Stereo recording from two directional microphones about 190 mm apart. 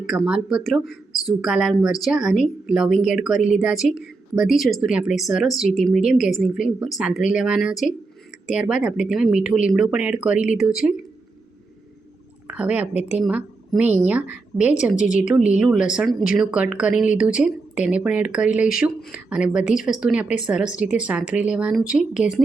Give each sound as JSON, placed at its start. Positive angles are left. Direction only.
{"t": 0.0, "sound": "a woman's voice", "side_deg": -5}
{"t": 12.5, "sound": "speech", "side_deg": -10}
{"t": 12.9, "sound": "a woman's voice", "side_deg": 35}
{"t": 13.1, "sound": "a woman's voice", "side_deg": -5}
{"t": 14.9, "sound": "a woman's voice", "side_deg": 40}
{"t": 15.2, "sound": "a woman's voice", "side_deg": -5}